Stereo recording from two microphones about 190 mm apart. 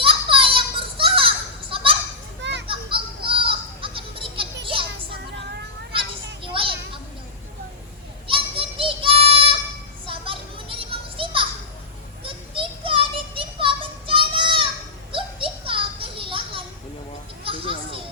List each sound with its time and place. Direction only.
0.0 s a sound: 30° right (ahead or behind)
1.7 s children playing: 30° right (ahead or behind)
2.4 s children playing: 65° right (ahead or behind)
2.6 s children playing: 25° right (ahead or behind)
6.4 s a sound: 25° right (ahead or behind)
8.3 s child singing: 30° right (ahead or behind)
10.1 s children playing: 30° right (ahead or behind)
12.2 s a sound: 25° right (ahead or behind)
15.1 s children playing: 25° right (ahead or behind)